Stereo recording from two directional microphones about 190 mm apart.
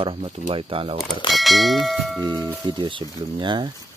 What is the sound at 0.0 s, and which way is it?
Speech, 30° right (ahead or behind).